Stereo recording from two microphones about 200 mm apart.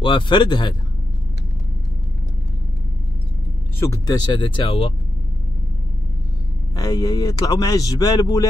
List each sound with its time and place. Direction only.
0.0 s speech: 25° left (ahead or behind)
3.8 s speech: 15° left (ahead or behind)
6.7 s speech: 15° left (ahead or behind)